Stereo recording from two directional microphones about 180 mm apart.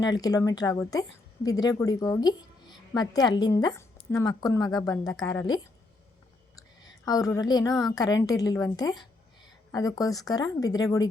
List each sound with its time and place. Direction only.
0.0 s a woman's voice: 20° left (ahead or behind)
6.6 s a woman's voice: 20° left (ahead or behind)